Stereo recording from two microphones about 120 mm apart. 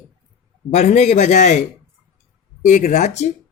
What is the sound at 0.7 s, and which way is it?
Speech, 70° left (ahead or behind).